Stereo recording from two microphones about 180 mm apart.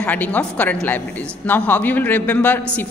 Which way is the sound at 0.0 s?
10° left (ahead or behind).